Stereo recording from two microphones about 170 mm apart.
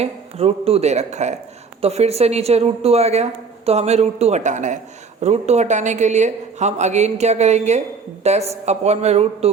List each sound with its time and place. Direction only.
0.0 s a woman's voice: 35° right (ahead or behind)